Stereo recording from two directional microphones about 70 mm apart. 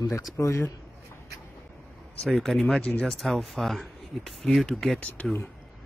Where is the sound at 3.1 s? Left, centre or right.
Centre.